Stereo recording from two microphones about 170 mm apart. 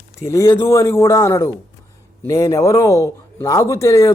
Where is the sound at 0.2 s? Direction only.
20° left (ahead or behind).